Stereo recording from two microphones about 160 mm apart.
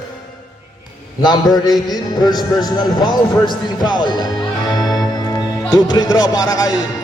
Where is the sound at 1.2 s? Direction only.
25° left (ahead or behind).